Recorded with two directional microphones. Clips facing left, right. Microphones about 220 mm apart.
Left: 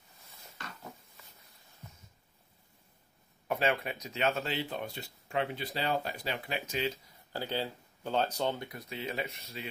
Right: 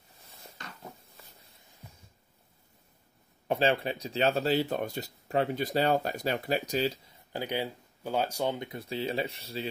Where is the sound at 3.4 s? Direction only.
30° right (ahead or behind).